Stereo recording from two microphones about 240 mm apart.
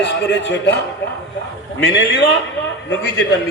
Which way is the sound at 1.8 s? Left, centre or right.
Left.